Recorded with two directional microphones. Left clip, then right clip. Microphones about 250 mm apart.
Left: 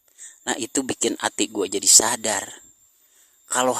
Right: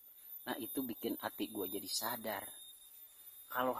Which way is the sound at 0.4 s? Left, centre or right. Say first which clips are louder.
Left 16 dB; left.